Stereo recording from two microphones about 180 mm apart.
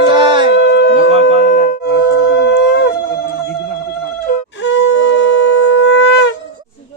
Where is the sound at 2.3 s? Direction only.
70° left (ahead or behind).